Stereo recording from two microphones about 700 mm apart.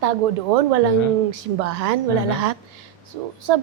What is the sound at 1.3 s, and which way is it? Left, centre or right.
Speech, right.